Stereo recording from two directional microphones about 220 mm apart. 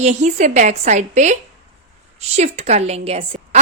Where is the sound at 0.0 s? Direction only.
30° right (ahead or behind).